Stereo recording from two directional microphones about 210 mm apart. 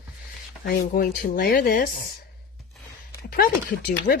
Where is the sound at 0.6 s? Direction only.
45° left (ahead or behind).